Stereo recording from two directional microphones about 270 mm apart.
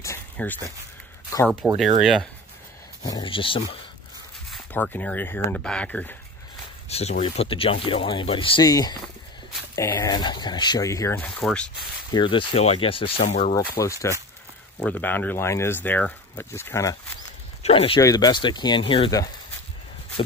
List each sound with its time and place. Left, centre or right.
0.0 s a sound: centre
1.6 s speech: centre
3.0 s speech: centre
4.5 s speech: centre
6.9 s speech: left; by 11.7 s centre
12.1 s speech: centre
17.6 s speech: left